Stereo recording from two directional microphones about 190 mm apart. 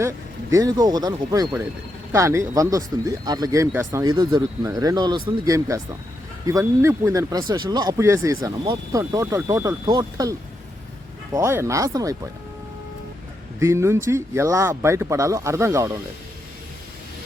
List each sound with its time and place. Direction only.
0.5 s speech: 20° right (ahead or behind)
13.6 s speech: 15° right (ahead or behind)